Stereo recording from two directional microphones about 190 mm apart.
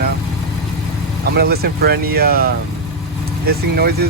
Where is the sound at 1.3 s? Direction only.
55° right (ahead or behind).